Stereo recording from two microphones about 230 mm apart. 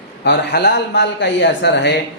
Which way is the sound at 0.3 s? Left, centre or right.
Left.